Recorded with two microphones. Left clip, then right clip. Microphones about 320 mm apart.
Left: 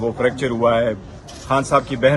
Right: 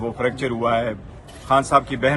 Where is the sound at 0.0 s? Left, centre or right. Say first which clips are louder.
Left 4 dB; centre.